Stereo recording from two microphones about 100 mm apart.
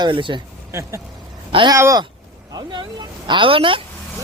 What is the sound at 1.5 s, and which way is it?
Speech, 60° right (ahead or behind).